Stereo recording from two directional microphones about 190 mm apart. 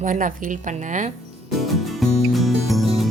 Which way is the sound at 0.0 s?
45° right (ahead or behind).